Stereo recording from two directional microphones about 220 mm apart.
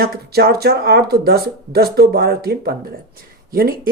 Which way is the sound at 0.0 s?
45° right (ahead or behind).